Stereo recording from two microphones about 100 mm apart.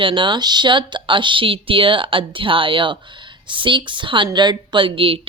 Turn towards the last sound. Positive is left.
turn(degrees=-65)  # may be behind; listen again after turning